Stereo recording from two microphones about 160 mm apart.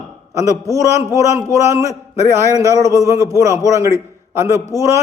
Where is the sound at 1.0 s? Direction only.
20° right (ahead or behind).